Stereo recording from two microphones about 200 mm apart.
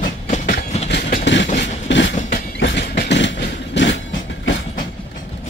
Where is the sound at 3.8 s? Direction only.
65° left (ahead or behind).